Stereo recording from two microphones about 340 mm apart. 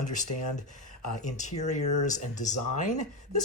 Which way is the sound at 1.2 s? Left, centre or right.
Left.